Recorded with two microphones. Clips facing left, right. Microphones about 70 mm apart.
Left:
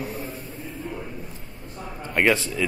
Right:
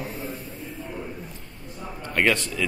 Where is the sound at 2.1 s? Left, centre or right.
Centre.